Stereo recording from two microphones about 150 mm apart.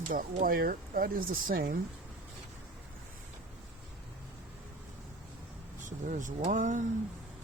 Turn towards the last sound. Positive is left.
turn(degrees=-55)  # may be behind; listen again after turning